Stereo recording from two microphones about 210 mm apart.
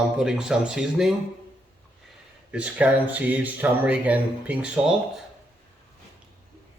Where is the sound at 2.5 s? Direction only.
5° right (ahead or behind).